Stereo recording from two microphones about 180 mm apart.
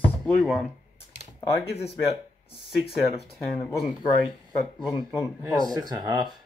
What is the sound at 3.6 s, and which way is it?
Speech, 20° left (ahead or behind).